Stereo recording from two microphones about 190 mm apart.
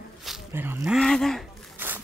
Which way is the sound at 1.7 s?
10° right (ahead or behind).